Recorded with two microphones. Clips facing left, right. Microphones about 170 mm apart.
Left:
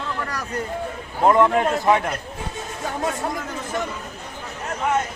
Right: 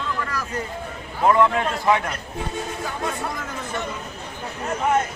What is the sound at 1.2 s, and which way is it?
Speech, 20° left (ahead or behind).